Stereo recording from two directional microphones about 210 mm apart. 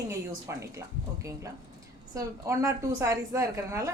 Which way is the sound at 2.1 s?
15° right (ahead or behind).